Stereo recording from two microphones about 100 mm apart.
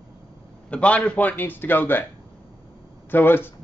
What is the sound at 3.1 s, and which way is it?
Speech, 20° left (ahead or behind).